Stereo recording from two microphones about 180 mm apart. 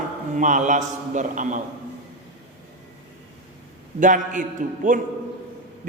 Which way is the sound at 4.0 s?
45° right (ahead or behind).